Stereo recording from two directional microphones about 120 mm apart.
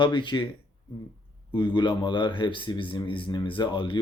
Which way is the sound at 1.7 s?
40° left (ahead or behind).